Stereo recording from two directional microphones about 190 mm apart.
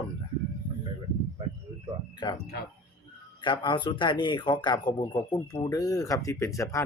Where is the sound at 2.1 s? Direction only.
25° left (ahead or behind).